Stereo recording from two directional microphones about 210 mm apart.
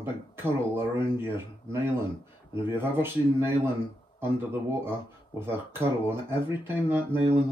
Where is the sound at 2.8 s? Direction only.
10° right (ahead or behind).